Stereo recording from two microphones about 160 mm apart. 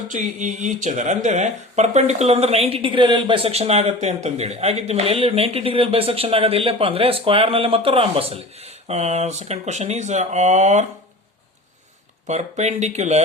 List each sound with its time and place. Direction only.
0.1 s speech: 50° right (ahead or behind)
12.3 s speech: 45° right (ahead or behind)